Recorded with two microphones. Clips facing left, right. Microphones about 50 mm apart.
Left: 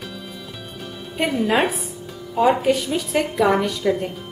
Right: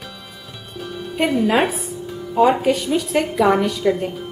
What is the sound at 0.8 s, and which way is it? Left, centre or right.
A woman's voice, centre.